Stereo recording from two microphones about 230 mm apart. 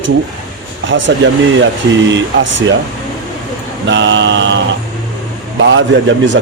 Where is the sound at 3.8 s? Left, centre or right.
Right.